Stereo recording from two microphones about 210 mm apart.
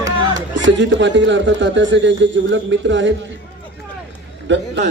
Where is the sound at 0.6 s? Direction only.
60° right (ahead or behind).